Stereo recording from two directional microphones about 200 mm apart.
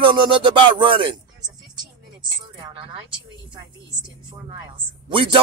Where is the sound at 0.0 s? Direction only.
25° right (ahead or behind).